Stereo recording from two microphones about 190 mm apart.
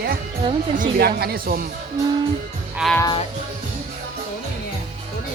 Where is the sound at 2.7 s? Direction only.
Centre (ahead or behind).